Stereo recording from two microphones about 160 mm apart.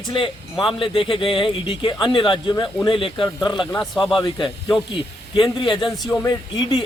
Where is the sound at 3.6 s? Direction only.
Centre (ahead or behind).